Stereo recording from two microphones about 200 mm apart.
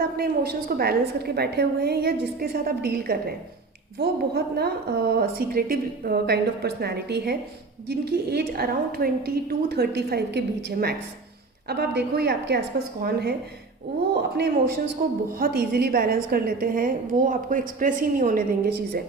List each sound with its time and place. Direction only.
0.2 s a woman's voice: 50° right (ahead or behind)
15.0 s a woman's voice: 45° right (ahead or behind)